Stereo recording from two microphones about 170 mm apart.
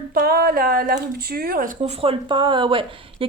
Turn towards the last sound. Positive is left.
turn(degrees=-30)  # may be behind; listen again after turning